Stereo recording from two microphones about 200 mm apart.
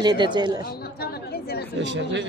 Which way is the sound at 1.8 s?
65° right (ahead or behind).